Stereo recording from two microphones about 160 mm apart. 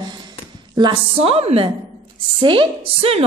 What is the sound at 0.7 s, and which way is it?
A woman's voice, 30° right (ahead or behind).